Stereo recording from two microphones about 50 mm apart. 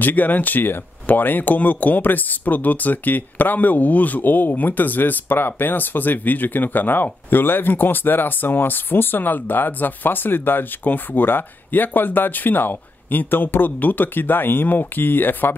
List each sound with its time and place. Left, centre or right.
0.0 s speech: left